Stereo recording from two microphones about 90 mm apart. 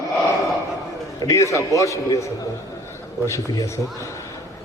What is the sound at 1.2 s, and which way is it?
A man's voice, 35° left (ahead or behind).